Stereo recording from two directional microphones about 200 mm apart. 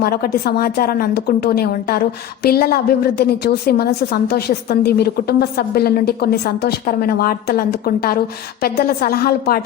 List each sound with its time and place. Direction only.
0.0 s a woman's voice: 50° left (ahead or behind)